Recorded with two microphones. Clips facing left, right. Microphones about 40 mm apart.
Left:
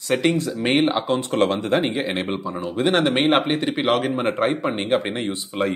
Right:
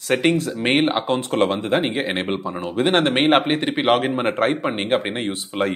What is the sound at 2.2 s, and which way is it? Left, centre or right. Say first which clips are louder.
Speech: right 1 dB; right.